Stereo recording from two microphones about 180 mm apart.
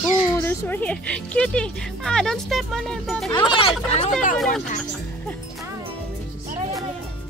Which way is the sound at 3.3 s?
30° left (ahead or behind).